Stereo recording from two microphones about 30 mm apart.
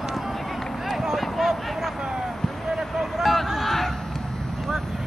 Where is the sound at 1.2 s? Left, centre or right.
Centre.